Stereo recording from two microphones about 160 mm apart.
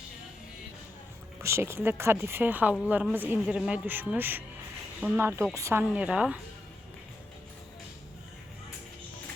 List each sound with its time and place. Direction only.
1.4 s speech: 15° right (ahead or behind)